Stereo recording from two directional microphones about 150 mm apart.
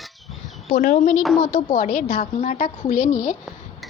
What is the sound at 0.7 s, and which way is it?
A woman's voice, 65° left (ahead or behind).